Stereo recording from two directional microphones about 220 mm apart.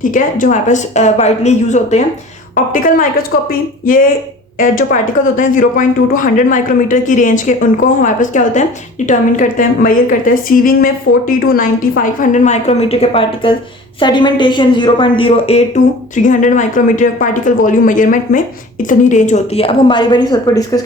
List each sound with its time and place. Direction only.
0.0 s a woman's voice: 35° left (ahead or behind)
4.5 s a woman's voice: 40° left (ahead or behind); by 20.8 s 15° left (ahead or behind)